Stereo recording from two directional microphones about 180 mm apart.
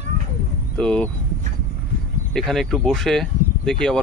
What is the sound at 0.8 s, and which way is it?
Speech, 5° left (ahead or behind).